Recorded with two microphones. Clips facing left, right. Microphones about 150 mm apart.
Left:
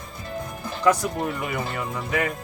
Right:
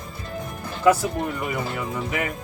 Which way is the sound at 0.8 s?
5° right (ahead or behind).